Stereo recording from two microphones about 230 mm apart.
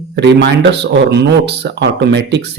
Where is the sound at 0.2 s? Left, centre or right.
Right.